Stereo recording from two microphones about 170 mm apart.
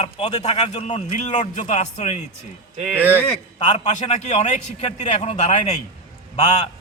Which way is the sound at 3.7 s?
40° left (ahead or behind).